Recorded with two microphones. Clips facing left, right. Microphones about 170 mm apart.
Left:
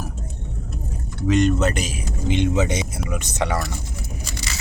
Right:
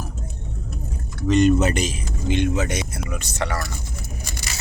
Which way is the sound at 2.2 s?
20° left (ahead or behind).